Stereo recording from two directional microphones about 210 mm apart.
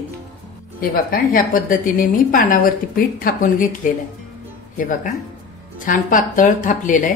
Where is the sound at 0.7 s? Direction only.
45° left (ahead or behind).